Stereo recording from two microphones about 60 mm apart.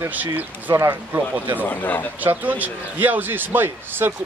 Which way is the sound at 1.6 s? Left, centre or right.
Left.